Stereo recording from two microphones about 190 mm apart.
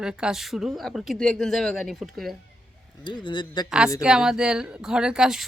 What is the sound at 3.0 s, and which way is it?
Speech, 25° left (ahead or behind).